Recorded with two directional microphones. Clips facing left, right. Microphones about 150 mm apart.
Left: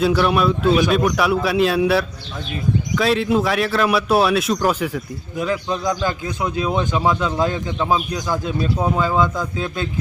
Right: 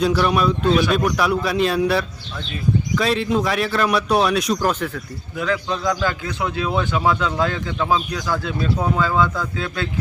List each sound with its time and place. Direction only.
0.0 s a man's voice: centre (ahead or behind)
5.4 s a man's voice: 20° left (ahead or behind)